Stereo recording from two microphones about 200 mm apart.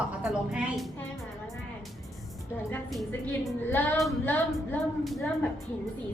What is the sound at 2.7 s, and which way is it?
Speech, centre (ahead or behind).